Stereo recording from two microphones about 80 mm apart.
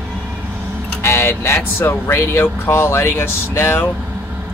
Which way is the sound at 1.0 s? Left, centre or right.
Left.